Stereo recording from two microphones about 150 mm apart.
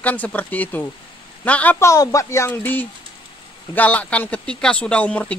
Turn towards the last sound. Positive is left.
turn(degrees=10)  # may be behind; listen again after turning